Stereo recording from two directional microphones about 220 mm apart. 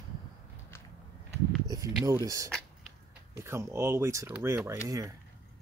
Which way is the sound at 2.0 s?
15° right (ahead or behind).